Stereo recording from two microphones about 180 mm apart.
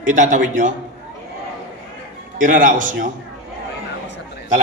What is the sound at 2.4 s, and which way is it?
Speech, 50° right (ahead or behind).